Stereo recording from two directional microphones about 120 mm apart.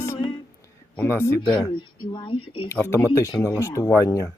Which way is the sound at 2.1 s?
45° left (ahead or behind).